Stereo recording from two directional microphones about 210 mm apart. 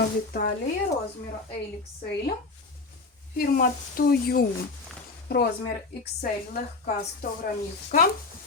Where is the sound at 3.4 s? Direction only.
45° left (ahead or behind).